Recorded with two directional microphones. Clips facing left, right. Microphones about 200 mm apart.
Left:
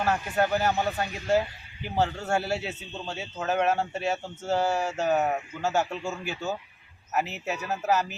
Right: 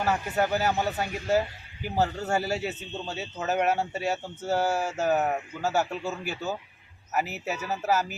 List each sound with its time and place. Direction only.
0.0 s a man's voice: 5° right (ahead or behind)